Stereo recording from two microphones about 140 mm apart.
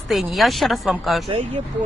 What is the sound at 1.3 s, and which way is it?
Speech, 45° right (ahead or behind).